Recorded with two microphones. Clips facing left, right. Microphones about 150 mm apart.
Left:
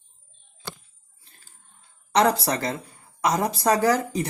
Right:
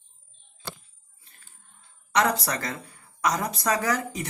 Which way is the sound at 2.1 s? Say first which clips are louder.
Left 4 dB; 30° left (ahead or behind).